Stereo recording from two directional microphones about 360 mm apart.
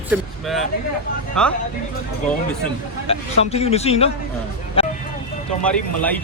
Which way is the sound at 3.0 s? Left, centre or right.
Centre.